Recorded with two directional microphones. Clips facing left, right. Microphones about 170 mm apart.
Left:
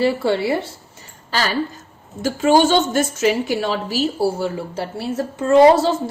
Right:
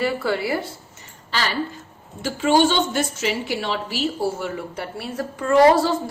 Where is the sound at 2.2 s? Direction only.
45° left (ahead or behind).